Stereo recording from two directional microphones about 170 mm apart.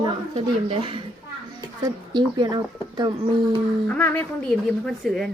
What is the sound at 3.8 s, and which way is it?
Speech, 10° left (ahead or behind).